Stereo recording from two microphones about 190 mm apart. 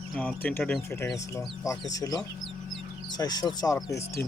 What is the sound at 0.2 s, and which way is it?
Speech, 10° left (ahead or behind).